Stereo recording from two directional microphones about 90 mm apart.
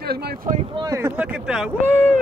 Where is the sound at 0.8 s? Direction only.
30° right (ahead or behind).